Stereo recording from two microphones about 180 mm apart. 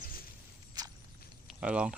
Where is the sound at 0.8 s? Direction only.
20° right (ahead or behind).